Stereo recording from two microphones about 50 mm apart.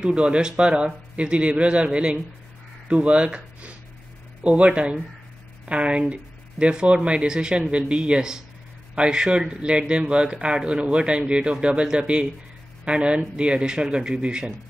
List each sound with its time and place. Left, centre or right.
0.0 s speech: centre